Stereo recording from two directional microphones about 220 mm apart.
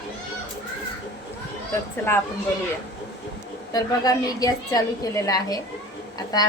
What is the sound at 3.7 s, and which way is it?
A woman's voice, 15° left (ahead or behind).